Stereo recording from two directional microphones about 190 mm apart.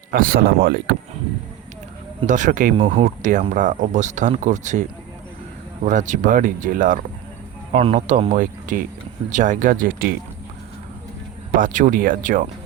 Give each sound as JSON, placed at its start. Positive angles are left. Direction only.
{"t": 0.1, "sound": "speech", "side_deg": -50}
{"t": 2.2, "sound": "speech", "side_deg": -40}
{"t": 7.8, "sound": "speech", "side_deg": -30}
{"t": 11.5, "sound": "speech", "side_deg": -45}